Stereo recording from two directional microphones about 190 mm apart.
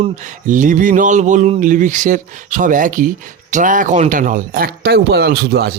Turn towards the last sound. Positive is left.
turn(degrees=-60)  # may be behind; listen again after turning